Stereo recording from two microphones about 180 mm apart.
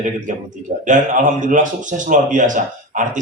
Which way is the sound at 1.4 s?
45° right (ahead or behind).